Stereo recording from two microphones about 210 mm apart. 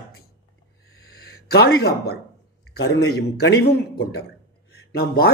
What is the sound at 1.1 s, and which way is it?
Speech, 50° left (ahead or behind).